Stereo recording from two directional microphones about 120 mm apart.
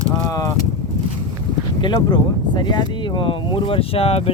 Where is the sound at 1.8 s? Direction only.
40° left (ahead or behind).